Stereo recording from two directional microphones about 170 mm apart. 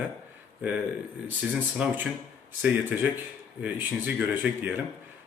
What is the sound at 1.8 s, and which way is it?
Speech, 5° right (ahead or behind).